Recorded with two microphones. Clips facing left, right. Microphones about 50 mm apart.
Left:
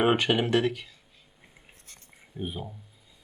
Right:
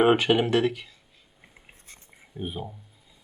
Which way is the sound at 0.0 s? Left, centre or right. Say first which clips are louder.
Right 3 dB; centre.